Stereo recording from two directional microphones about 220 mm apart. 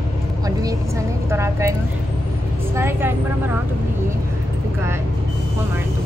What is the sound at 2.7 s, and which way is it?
Speech, 10° right (ahead or behind).